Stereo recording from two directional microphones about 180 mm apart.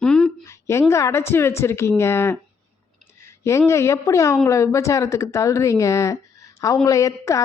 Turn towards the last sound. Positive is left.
turn(degrees=15)  # may be behind; listen again after turning